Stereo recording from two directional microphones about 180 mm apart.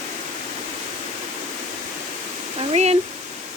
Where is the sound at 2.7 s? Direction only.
35° right (ahead or behind).